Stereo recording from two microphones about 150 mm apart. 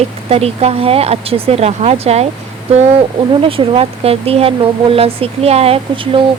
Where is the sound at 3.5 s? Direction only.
35° right (ahead or behind).